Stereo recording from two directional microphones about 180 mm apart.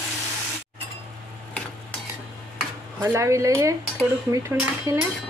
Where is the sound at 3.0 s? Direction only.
15° right (ahead or behind).